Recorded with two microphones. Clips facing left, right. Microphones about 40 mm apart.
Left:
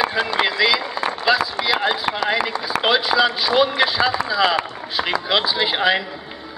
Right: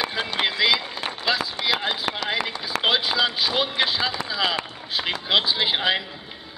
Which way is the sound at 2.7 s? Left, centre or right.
Centre.